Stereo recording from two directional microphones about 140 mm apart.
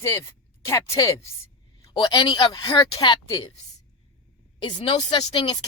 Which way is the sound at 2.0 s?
30° left (ahead or behind).